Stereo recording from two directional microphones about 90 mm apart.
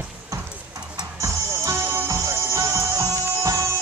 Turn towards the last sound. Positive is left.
turn(degrees=-35)  # may be behind; listen again after turning